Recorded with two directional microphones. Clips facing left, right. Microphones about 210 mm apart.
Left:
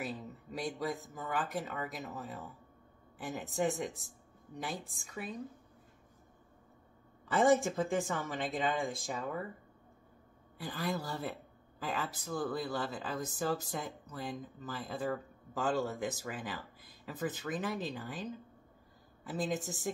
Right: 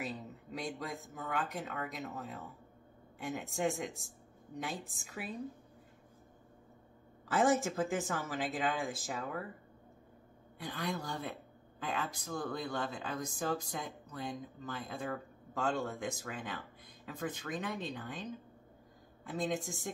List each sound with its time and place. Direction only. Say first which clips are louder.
0.0 s speech: left 1 dB; centre (ahead or behind)
7.2 s speech: left 2 dB; centre (ahead or behind)
10.6 s speech: left 2 dB; centre (ahead or behind)